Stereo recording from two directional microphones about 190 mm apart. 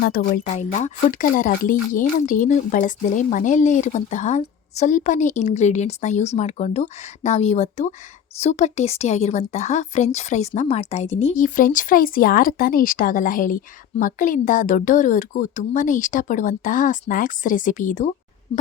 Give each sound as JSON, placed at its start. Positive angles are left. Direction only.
{"t": 0.0, "sound": "speech", "side_deg": 45}